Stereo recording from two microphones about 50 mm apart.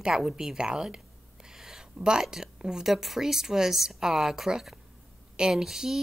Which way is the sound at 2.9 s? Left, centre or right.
Centre.